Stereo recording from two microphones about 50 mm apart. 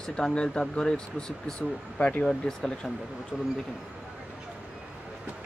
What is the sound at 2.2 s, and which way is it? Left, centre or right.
Speech, centre.